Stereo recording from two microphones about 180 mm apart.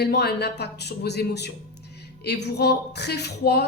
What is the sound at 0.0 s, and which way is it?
A woman's voice, 60° left (ahead or behind).